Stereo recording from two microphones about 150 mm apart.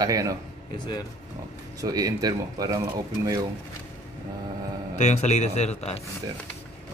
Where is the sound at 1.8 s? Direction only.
25° right (ahead or behind).